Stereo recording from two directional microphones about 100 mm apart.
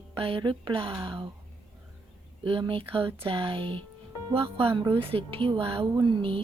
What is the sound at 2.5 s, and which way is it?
Speech, 60° right (ahead or behind).